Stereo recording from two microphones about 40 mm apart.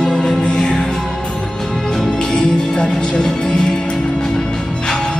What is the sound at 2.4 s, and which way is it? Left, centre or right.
Music, centre.